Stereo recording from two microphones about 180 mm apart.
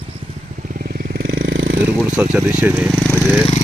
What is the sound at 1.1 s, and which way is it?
Vehicle, 65° right (ahead or behind).